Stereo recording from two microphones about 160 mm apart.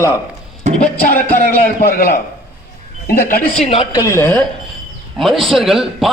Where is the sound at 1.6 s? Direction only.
65° left (ahead or behind).